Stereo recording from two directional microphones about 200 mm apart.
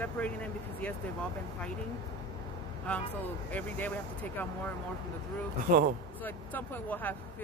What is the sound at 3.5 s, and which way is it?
Speech, 10° left (ahead or behind).